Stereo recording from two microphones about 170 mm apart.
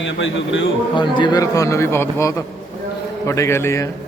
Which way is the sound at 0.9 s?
25° left (ahead or behind).